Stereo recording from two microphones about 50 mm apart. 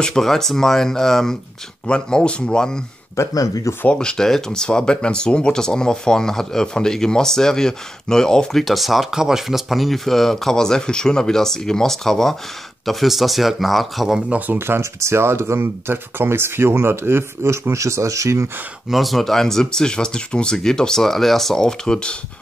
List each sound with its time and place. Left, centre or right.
0.0 s speech: centre
3.9 s speech: centre
14.3 s speech: right
14.7 s speech: right
18.9 s speech: centre